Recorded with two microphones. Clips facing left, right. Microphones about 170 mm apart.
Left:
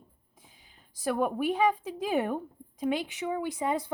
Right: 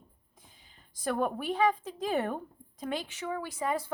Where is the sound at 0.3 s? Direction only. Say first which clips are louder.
Left 1 dB; 10° left (ahead or behind).